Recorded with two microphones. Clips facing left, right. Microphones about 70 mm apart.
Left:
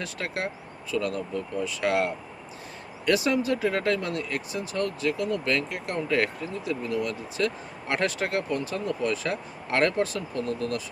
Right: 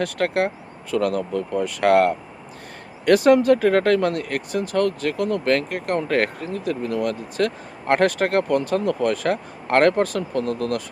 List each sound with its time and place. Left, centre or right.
0.0 s speech: right